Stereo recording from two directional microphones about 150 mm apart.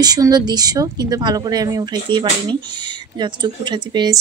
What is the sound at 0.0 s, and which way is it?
Speech, 25° right (ahead or behind).